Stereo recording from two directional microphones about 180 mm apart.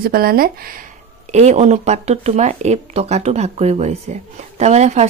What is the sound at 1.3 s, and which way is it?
Speech, 40° right (ahead or behind).